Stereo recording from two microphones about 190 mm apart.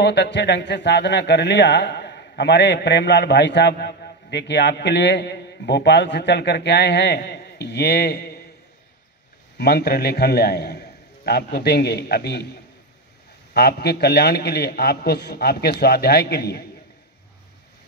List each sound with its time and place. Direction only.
0.0 s speech: 65° left (ahead or behind)
9.6 s speech: 60° left (ahead or behind)
13.5 s speech: 55° left (ahead or behind)